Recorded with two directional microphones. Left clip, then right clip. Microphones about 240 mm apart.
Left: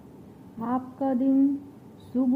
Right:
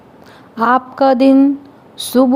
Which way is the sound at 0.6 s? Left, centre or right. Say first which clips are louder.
Right 18 dB; right.